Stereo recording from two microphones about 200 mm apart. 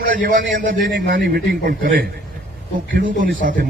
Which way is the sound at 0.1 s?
45° right (ahead or behind).